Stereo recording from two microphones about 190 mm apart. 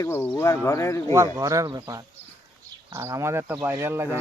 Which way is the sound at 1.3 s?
15° right (ahead or behind).